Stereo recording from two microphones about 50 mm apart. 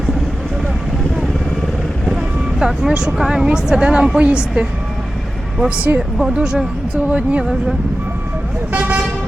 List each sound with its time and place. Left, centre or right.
2.0 s vehicle: centre
3.2 s a woman's voice: centre
5.6 s speech: right
6.3 s speech: centre
7.1 s a woman's voice: right
8.7 s speech: right